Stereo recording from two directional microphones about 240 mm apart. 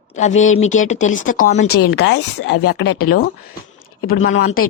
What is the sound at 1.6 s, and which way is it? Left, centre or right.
Speech, left.